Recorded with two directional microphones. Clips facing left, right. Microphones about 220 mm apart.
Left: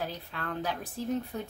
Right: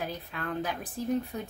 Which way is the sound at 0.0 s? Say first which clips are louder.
Right 1 dB; 15° right (ahead or behind).